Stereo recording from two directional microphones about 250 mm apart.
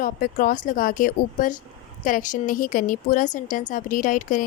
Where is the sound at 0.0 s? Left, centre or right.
Left.